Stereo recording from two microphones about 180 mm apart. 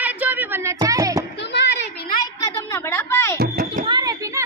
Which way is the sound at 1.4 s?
75° left (ahead or behind).